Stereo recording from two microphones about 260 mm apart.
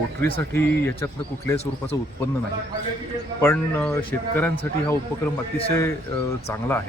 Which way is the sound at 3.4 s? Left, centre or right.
Centre.